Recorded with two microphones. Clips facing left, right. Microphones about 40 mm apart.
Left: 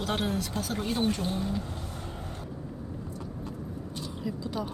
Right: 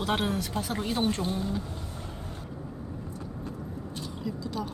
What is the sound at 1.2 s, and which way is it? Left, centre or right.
Speech, left.